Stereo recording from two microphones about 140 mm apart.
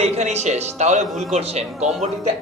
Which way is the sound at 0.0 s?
55° right (ahead or behind).